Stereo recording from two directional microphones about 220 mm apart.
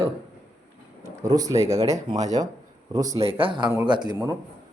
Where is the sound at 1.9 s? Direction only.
15° right (ahead or behind).